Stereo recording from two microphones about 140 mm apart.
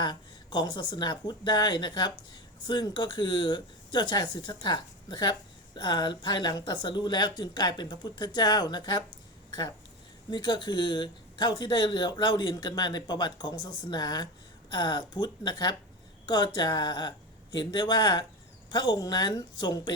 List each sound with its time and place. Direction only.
0.0 s speech: 30° left (ahead or behind)
10.2 s a woman's voice: 30° left (ahead or behind)